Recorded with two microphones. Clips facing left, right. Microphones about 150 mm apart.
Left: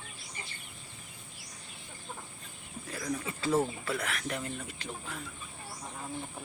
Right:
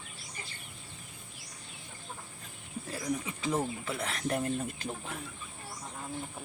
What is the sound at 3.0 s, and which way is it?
Speech, 15° right (ahead or behind).